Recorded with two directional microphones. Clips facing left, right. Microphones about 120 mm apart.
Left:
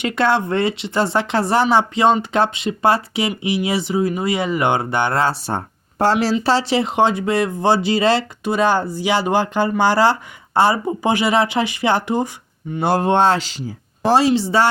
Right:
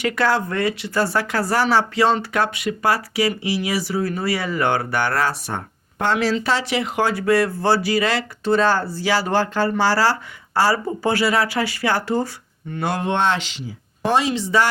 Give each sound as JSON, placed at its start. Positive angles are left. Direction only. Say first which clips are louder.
{"t": 0.0, "sound": "speech", "louder": "left 2 dB", "side_deg": 25}
{"t": 8.4, "sound": "speech", "louder": "even", "side_deg": 15}
{"t": 12.8, "sound": "speech", "louder": "left 5 dB", "side_deg": 35}